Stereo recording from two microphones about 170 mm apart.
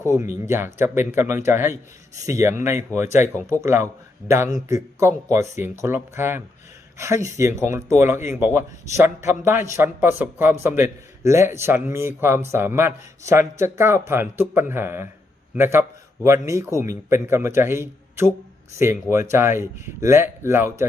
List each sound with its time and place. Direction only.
0.2 s a man's voice: 15° right (ahead or behind)